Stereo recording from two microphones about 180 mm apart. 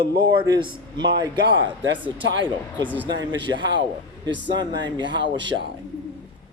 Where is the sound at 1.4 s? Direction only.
85° right.